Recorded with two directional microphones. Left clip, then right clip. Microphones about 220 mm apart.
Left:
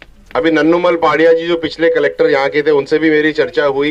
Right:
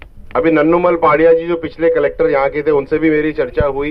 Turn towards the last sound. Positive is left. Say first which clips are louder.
# left 3 dB
turn(degrees=50)  # may be behind; listen again after turning